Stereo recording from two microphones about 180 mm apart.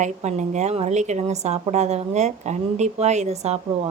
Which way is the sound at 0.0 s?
40° right (ahead or behind).